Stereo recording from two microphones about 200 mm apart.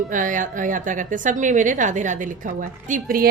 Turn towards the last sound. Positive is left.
turn(degrees=-40)  # may be behind; listen again after turning